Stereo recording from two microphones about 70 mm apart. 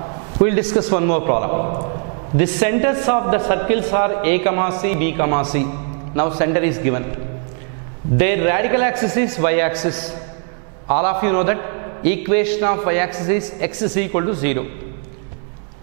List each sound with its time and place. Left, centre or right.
0.4 s a man's voice: centre
8.2 s a man's voice: centre